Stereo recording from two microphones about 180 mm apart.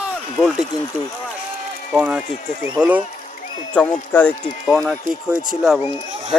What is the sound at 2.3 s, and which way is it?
Speech, 40° left (ahead or behind).